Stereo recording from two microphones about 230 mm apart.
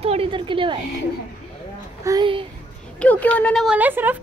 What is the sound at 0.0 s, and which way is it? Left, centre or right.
Speech, right.